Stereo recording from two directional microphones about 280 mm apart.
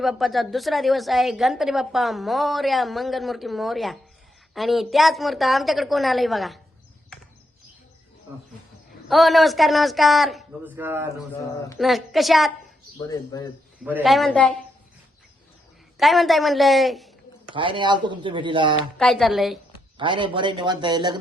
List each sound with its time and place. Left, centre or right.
0.0 s a woman's voice: centre
9.0 s a woman's voice: centre
13.1 s speech: centre
13.8 s a woman's voice: centre
16.0 s a man's voice: centre
17.5 s speech: centre
18.9 s a woman's voice: centre
20.0 s speech: centre